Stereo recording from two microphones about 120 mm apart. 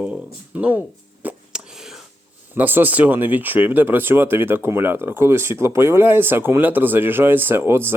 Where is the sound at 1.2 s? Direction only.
5° right (ahead or behind).